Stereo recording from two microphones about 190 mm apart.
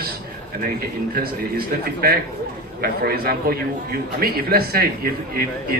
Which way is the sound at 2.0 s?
55° right (ahead or behind).